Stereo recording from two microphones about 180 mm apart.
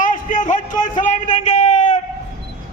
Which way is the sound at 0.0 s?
45° left (ahead or behind).